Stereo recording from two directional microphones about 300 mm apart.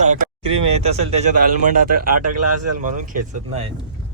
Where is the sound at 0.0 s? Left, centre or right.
Right.